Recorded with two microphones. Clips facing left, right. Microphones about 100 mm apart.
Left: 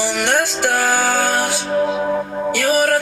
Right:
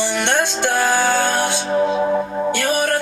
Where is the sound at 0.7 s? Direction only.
40° left (ahead or behind).